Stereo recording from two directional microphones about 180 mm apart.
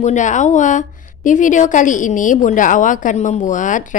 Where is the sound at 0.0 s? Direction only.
40° left (ahead or behind).